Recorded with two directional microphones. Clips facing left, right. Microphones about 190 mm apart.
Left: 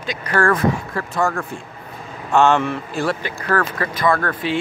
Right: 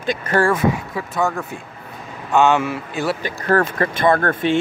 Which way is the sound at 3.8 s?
25° right (ahead or behind).